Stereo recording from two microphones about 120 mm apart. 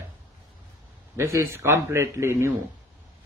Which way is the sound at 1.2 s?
25° right (ahead or behind).